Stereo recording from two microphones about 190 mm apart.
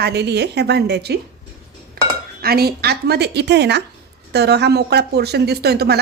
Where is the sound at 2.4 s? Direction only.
55° right (ahead or behind).